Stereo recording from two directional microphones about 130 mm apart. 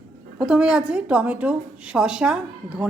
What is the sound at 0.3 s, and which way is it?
A woman's voice, 5° right (ahead or behind).